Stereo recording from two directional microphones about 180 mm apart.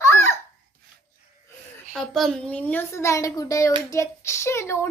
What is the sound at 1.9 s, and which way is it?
A child's voice, centre (ahead or behind).